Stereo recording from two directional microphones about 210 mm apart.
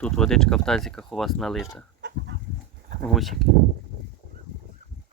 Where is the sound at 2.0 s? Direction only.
60° right (ahead or behind).